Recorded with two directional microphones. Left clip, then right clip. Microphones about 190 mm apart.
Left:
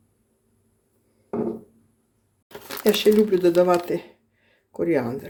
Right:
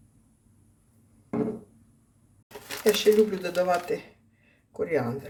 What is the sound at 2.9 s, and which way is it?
Speech, 45° left (ahead or behind).